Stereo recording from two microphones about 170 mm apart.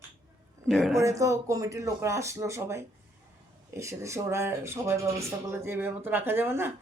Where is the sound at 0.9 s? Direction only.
20° right (ahead or behind).